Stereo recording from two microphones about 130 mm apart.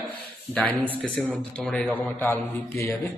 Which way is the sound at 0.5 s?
10° left (ahead or behind).